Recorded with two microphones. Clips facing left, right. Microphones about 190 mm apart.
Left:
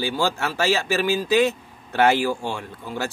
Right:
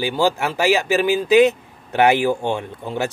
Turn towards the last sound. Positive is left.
turn(degrees=-20)  # may be behind; listen again after turning